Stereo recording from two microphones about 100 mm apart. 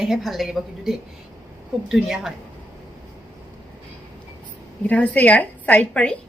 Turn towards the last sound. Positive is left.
turn(degrees=10)  # may be behind; listen again after turning